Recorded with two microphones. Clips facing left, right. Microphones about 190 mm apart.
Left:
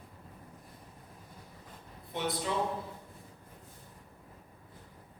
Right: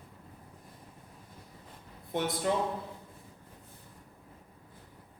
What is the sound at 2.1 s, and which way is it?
Speech, 50° right (ahead or behind).